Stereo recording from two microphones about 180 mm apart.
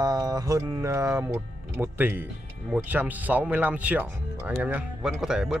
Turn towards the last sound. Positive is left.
turn(degrees=-5)  # may be behind; listen again after turning